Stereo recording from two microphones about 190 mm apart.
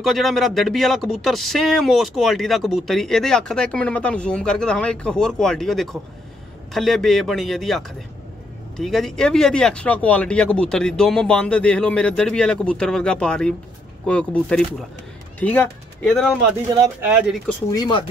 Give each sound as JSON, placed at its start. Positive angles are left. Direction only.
{"t": 0.0, "sound": "speech", "side_deg": 0}
{"t": 16.8, "sound": "speech", "side_deg": -10}
{"t": 17.6, "sound": "speech", "side_deg": 20}